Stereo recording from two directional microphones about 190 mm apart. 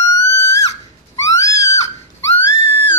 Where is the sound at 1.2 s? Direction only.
15° left (ahead or behind).